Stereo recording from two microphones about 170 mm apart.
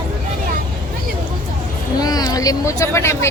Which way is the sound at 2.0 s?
20° left (ahead or behind).